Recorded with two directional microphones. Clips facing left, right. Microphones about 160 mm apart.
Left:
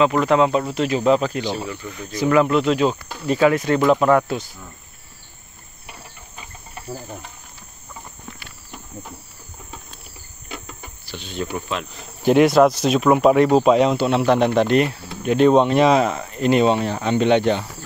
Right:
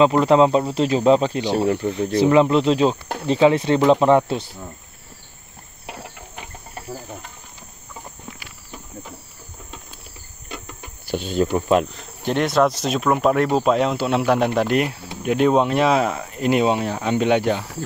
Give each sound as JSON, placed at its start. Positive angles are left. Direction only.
{"t": 0.0, "sound": "speech", "side_deg": -30}
{"t": 1.5, "sound": "speech", "side_deg": -60}
{"t": 2.1, "sound": "speech", "side_deg": -25}
{"t": 5.9, "sound": "a sound", "side_deg": -80}
{"t": 6.9, "sound": "speech", "side_deg": 0}
{"t": 11.1, "sound": "speech", "side_deg": -45}
{"t": 11.9, "sound": "speech", "side_deg": 5}